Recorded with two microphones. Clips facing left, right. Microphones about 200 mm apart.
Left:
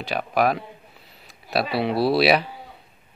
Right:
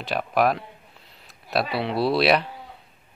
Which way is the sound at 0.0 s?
Centre (ahead or behind).